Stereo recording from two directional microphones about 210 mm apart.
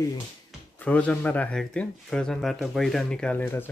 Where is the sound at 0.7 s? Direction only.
5° left (ahead or behind).